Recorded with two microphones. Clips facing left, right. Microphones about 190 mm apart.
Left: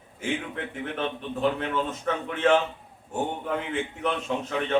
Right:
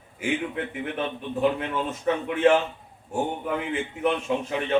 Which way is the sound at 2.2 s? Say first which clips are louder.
Right 5 dB; 10° right (ahead or behind).